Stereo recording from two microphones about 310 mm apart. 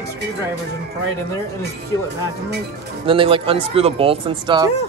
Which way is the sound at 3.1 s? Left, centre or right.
Centre.